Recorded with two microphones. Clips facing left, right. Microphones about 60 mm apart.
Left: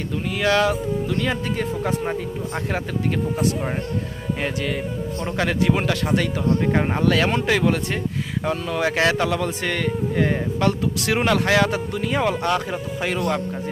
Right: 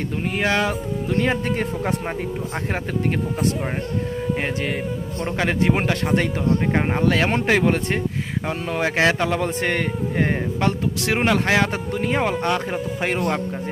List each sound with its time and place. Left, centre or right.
0.3 s a man's voice: right
4.4 s a man's voice: right
6.7 s a man's voice: centre
7.3 s speech: right
8.4 s a man's voice: right
12.5 s speech: centre
13.1 s speech: right